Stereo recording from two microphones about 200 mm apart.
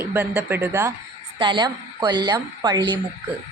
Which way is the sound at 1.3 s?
20° right (ahead or behind).